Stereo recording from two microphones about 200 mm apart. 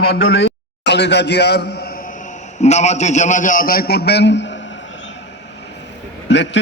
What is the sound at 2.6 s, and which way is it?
A man's voice, 35° left (ahead or behind).